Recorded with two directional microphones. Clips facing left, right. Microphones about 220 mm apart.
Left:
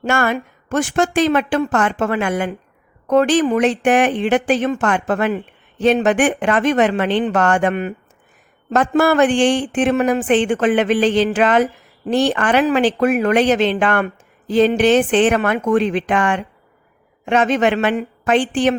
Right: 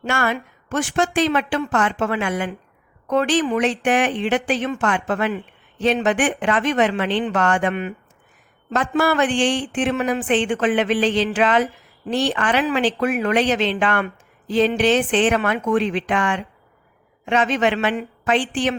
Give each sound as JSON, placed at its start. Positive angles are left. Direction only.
{"t": 0.0, "sound": "a woman's voice", "side_deg": 50}